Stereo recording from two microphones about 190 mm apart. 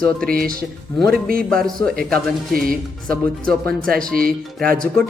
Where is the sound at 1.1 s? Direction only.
50° right (ahead or behind).